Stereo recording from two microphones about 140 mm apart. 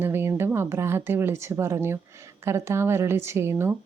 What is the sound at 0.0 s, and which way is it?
A woman's voice, 15° right (ahead or behind).